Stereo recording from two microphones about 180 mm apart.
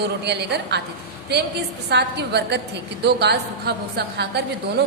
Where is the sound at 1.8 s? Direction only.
70° right (ahead or behind).